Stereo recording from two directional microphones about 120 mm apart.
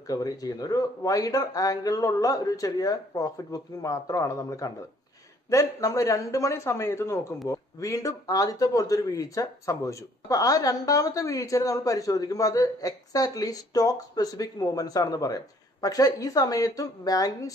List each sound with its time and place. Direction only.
0.0 s speech: 30° left (ahead or behind)